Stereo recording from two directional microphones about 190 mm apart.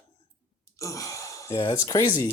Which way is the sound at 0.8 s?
15° left (ahead or behind).